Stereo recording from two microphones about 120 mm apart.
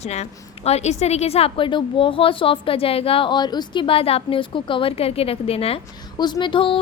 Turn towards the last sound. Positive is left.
turn(degrees=45)  # may be behind; listen again after turning